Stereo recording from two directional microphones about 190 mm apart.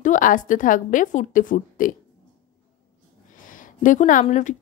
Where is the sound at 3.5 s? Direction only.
45° left (ahead or behind).